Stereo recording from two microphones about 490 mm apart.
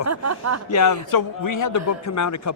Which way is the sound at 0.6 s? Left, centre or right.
Left.